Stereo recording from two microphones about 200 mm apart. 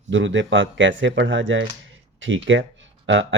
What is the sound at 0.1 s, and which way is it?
Speech, 70° right (ahead or behind).